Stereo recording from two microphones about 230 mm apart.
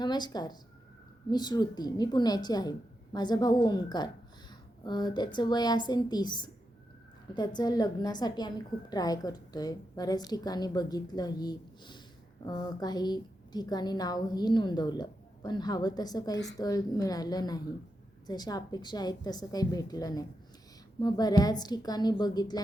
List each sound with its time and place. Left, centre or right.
0.0 s a woman's voice: centre